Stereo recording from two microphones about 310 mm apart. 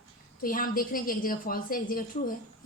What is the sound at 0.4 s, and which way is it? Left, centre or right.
A woman's voice, left.